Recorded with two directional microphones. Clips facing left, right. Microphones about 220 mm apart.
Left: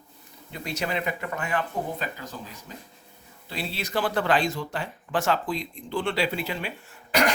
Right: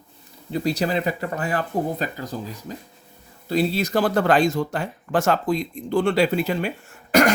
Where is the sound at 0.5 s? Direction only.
35° right (ahead or behind).